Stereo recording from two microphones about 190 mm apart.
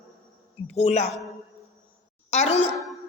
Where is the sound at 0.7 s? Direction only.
35° left (ahead or behind).